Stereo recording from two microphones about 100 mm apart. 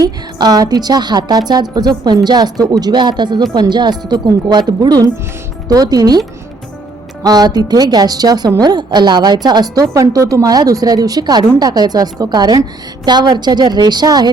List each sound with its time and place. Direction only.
0.0 s a woman's voice: 40° right (ahead or behind)